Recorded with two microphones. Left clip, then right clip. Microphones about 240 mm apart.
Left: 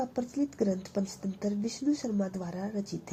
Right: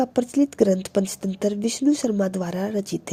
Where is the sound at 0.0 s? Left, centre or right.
Right.